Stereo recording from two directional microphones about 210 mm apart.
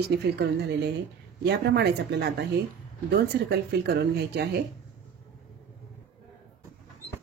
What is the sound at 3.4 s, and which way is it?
Speech, 50° right (ahead or behind).